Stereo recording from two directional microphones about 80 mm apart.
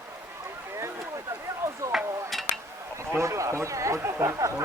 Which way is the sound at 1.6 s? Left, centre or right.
Right.